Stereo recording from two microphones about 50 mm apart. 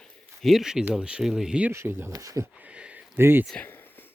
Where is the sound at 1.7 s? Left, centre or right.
Right.